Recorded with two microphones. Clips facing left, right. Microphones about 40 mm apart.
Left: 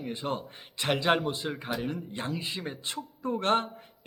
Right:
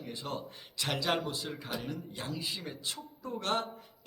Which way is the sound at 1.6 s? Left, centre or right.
Centre.